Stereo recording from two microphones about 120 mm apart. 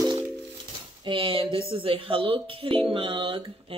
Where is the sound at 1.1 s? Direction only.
50° right (ahead or behind).